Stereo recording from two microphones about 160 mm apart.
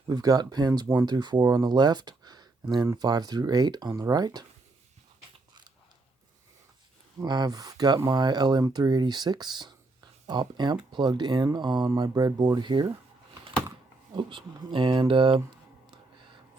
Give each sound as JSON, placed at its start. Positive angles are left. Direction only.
{"t": 0.1, "sound": "speech", "side_deg": -25}
{"t": 7.2, "sound": "speech", "side_deg": -25}
{"t": 14.2, "sound": "speech", "side_deg": -30}